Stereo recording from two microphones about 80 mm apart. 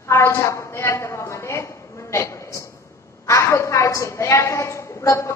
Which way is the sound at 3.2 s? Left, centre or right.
Left.